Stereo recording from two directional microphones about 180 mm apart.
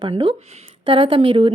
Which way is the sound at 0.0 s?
30° right (ahead or behind).